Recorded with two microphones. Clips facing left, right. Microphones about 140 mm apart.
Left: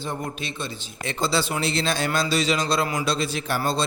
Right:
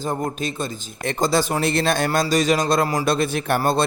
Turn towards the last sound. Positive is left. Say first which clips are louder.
# right 5 dB
turn(degrees=-55)  # may be behind; listen again after turning